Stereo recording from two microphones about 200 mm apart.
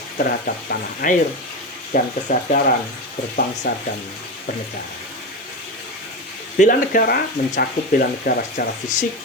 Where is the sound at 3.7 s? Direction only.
55° left (ahead or behind).